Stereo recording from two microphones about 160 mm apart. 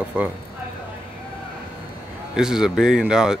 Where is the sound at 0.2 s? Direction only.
10° right (ahead or behind).